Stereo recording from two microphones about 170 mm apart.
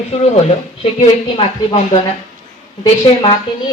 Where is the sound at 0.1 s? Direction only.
40° left (ahead or behind).